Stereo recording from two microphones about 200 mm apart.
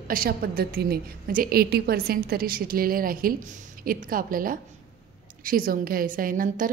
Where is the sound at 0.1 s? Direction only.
45° right (ahead or behind).